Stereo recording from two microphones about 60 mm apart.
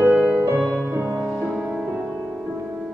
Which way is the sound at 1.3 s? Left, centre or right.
Centre.